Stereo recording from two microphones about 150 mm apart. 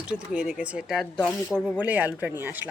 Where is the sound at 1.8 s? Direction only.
10° right (ahead or behind).